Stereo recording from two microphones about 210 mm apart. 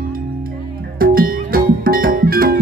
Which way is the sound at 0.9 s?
45° right (ahead or behind).